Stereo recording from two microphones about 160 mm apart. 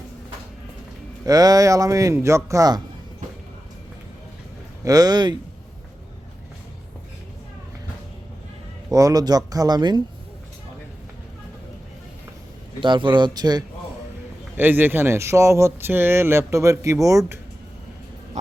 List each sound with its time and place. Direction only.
1.2 s speech: 25° right (ahead or behind)
4.8 s speech: 25° right (ahead or behind)
8.9 s speech: 25° right (ahead or behind)
12.8 s speech: 30° right (ahead or behind)
14.5 s speech: 10° right (ahead or behind)